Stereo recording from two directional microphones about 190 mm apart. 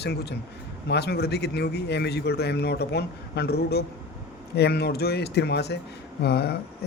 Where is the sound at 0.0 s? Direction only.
60° left (ahead or behind).